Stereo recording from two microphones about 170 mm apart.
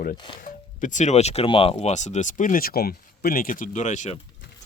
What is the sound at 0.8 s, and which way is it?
Speech, 45° left (ahead or behind).